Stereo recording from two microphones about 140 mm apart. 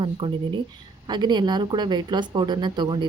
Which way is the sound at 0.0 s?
35° right (ahead or behind).